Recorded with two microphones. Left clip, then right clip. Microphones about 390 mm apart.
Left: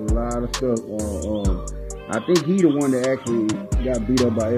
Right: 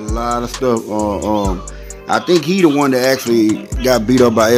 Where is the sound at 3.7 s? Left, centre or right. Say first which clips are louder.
Right 8 dB; centre.